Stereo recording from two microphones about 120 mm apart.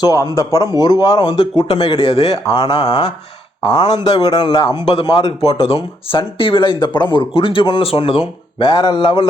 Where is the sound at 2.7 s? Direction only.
45° left (ahead or behind).